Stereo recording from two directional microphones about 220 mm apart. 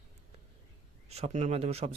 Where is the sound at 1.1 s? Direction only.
30° right (ahead or behind).